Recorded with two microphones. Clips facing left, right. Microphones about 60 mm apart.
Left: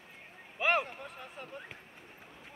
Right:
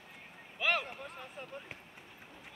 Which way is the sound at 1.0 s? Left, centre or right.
Centre.